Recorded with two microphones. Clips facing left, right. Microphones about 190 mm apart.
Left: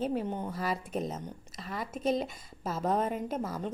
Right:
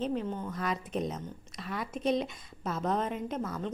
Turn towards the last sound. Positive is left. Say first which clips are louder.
# left 1 dB
turn(degrees=5)  # may be behind; listen again after turning